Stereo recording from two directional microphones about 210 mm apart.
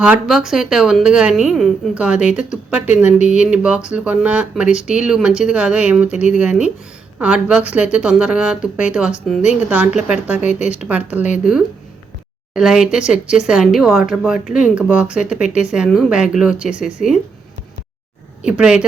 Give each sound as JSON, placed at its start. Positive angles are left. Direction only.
{"t": 0.0, "sound": "speech", "side_deg": -5}
{"t": 10.4, "sound": "speech", "side_deg": 35}
{"t": 10.8, "sound": "speech", "side_deg": -5}
{"t": 18.4, "sound": "speech", "side_deg": -5}